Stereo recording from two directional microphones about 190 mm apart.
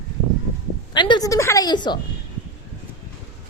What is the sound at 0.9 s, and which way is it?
A woman's voice, 25° left (ahead or behind).